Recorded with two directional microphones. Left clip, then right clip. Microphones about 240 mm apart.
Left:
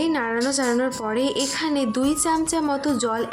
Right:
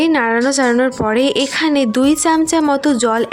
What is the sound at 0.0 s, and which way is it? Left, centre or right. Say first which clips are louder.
A woman's voice: right 9 dB; right.